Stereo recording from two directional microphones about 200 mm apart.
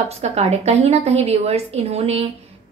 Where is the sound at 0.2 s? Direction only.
30° right (ahead or behind).